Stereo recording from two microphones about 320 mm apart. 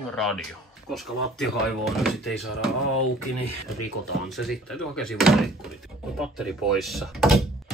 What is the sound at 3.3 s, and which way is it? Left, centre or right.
Speech, left.